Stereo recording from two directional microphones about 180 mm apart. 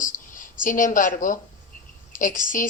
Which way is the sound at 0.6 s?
50° left (ahead or behind).